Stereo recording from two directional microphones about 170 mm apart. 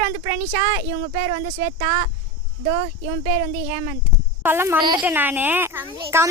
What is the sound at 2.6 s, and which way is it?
Speech, 40° right (ahead or behind).